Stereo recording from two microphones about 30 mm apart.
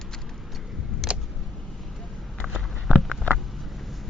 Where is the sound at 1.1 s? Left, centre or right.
Right.